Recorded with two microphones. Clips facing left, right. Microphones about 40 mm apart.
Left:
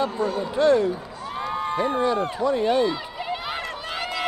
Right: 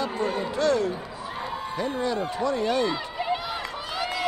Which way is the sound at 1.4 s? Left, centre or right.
Left.